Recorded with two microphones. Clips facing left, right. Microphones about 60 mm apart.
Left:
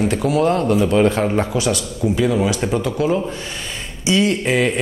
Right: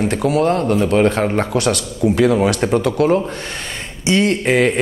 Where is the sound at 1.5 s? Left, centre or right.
Right.